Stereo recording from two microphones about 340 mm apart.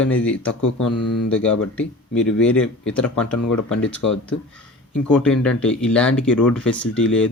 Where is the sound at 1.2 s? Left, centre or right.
Centre.